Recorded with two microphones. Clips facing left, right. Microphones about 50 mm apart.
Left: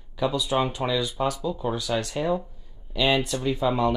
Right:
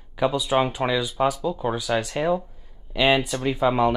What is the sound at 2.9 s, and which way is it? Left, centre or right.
Speech, right.